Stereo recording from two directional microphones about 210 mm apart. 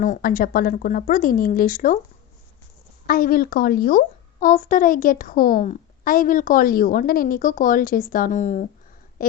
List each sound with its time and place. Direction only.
0.0 s a woman's voice: 40° left (ahead or behind)
3.1 s a woman's voice: 45° left (ahead or behind)